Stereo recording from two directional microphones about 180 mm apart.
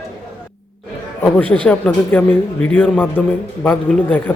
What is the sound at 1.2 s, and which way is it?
Speech, 5° left (ahead or behind).